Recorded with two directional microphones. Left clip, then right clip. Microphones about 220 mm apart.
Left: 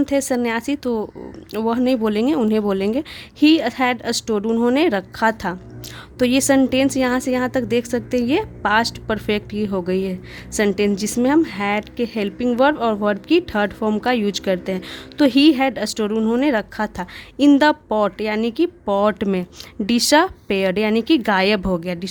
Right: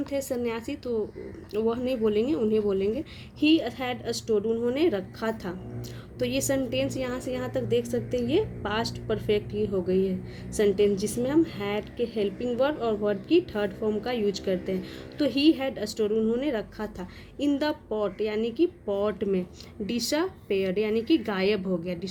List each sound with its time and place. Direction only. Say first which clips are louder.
0.0 s a woman's voice: left 10 dB; 45° left (ahead or behind)